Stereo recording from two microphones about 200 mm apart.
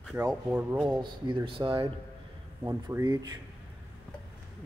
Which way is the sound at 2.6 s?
10° right (ahead or behind).